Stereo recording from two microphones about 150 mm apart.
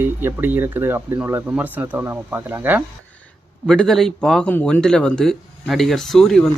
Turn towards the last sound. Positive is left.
turn(degrees=0)  # may be behind; listen again after turning